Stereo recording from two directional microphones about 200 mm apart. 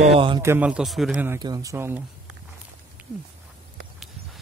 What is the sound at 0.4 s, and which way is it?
Speech, 10° right (ahead or behind).